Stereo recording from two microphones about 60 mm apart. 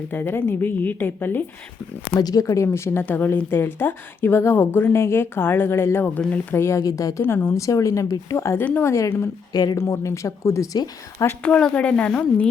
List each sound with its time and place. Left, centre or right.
0.1 s a woman's voice: left
2.1 s speech: left
2.6 s a woman's voice: left
6.8 s a woman's voice: left
7.2 s a woman's voice: left
7.5 s speech: left
8.5 s speech: left
8.8 s speech: left
9.7 s speech: left
11.4 s speech: centre